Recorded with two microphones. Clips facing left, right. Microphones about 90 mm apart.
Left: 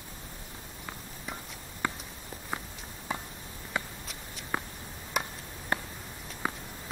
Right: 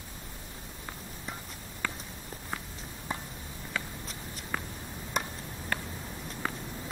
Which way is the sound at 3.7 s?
20° left (ahead or behind).